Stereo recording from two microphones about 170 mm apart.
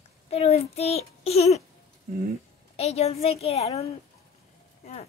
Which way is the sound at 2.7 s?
40° left (ahead or behind).